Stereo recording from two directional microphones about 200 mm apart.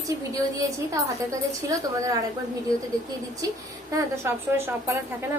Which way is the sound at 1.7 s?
15° right (ahead or behind).